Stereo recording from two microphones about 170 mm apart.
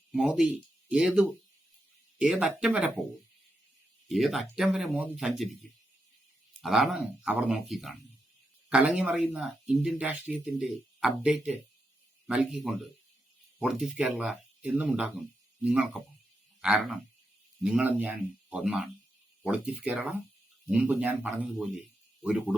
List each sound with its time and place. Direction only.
0.1 s speech: 5° right (ahead or behind)
4.1 s speech: centre (ahead or behind)
6.6 s speech: centre (ahead or behind)